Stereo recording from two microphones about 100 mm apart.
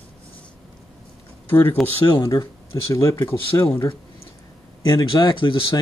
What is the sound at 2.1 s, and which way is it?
Speech, 50° left (ahead or behind).